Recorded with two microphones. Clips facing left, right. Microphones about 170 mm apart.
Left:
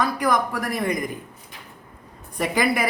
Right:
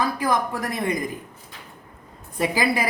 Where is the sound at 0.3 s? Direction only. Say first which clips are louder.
Left 1 dB; 25° right (ahead or behind).